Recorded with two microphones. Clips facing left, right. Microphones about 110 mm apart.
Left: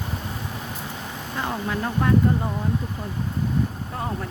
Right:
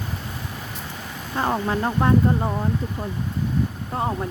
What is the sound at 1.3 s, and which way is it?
Speech, 35° right (ahead or behind).